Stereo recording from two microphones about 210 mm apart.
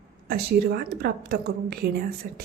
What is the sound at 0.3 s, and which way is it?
A woman's voice, 50° right (ahead or behind).